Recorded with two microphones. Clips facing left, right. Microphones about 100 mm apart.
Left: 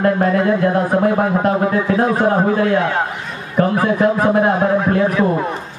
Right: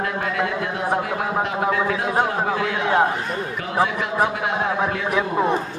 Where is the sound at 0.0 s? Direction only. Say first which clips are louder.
Left 9 dB; 40° left (ahead or behind).